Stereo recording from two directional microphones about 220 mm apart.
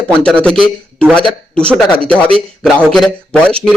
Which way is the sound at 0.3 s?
5° left (ahead or behind).